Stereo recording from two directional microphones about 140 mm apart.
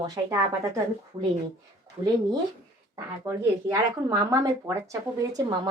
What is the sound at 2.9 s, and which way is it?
Speech, 20° right (ahead or behind).